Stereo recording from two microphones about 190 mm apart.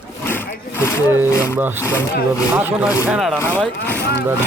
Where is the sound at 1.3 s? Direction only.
15° left (ahead or behind).